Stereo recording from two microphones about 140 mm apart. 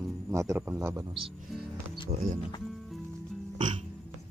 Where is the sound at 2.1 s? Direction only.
65° right (ahead or behind).